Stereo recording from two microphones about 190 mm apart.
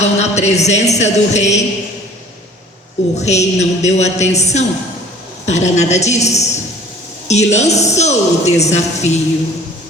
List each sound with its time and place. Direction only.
0.0 s a woman's voice: 35° left (ahead or behind)
3.2 s a woman's voice: 35° left (ahead or behind)